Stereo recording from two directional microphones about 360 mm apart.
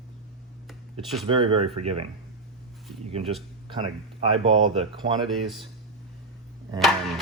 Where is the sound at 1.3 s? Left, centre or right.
Centre.